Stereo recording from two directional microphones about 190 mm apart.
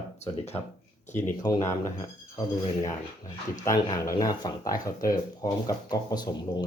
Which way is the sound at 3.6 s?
15° left (ahead or behind).